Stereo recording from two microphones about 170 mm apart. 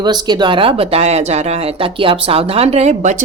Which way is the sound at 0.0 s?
25° right (ahead or behind).